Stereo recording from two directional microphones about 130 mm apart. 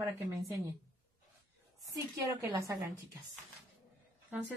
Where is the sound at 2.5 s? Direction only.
25° right (ahead or behind).